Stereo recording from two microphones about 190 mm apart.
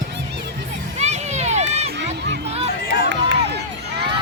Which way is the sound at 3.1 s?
65° right (ahead or behind).